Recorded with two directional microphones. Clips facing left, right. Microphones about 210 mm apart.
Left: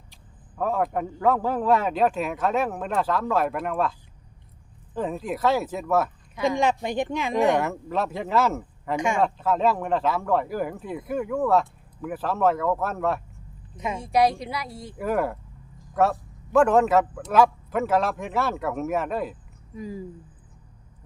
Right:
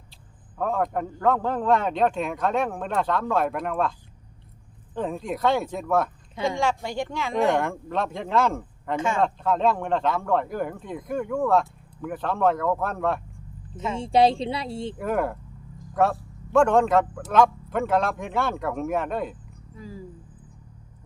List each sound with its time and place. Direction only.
0.5 s speech: 5° left (ahead or behind)
4.9 s speech: 5° left (ahead or behind)
6.8 s speech: 20° left (ahead or behind)
7.6 s speech: 5° left (ahead or behind)
9.2 s speech: 5° left (ahead or behind)
13.9 s speech: 30° right (ahead or behind)
14.9 s speech: centre (ahead or behind)
19.7 s speech: 15° left (ahead or behind)